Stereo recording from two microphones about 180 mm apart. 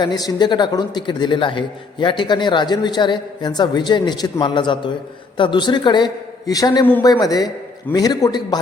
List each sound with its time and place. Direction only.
0.0 s a man's voice: 20° left (ahead or behind)